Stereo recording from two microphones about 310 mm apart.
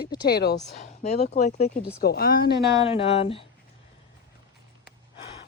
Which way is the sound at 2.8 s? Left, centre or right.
Centre.